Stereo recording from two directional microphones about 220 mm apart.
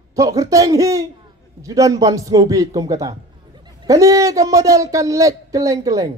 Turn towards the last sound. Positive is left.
turn(degrees=-15)  # may be behind; listen again after turning